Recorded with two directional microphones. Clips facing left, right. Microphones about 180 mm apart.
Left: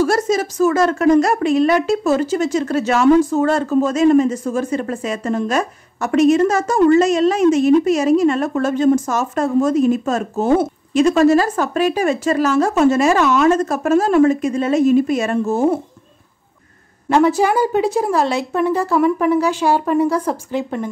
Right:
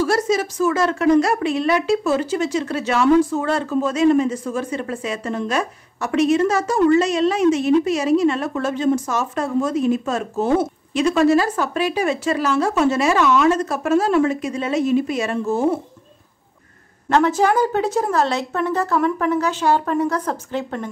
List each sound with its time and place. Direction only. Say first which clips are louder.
0.0 s a woman's voice: left 2 dB; 45° left (ahead or behind)
17.1 s a woman's voice: left 2 dB; 10° left (ahead or behind)